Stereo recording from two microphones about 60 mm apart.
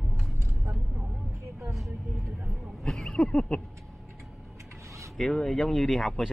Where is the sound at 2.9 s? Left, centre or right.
Centre.